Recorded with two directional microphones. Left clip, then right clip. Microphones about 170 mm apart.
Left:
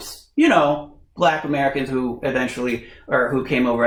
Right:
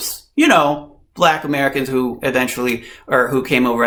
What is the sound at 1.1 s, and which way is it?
Speech, 30° right (ahead or behind).